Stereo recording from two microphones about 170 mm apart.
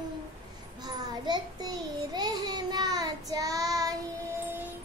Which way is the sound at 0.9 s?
25° right (ahead or behind).